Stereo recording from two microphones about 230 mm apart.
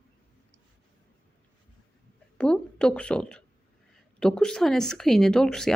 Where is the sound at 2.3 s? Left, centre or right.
Centre.